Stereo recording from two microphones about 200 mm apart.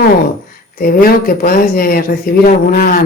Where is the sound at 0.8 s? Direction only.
45° left (ahead or behind).